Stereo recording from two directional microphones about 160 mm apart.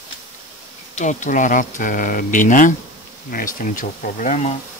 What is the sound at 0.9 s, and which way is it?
Speech, 50° left (ahead or behind).